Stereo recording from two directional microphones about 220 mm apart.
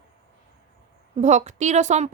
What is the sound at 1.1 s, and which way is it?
Speech, 30° right (ahead or behind).